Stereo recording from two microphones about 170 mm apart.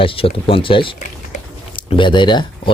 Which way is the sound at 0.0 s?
30° left (ahead or behind).